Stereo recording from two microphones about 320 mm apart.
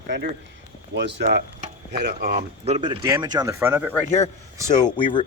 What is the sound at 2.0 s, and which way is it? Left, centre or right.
Speech, right.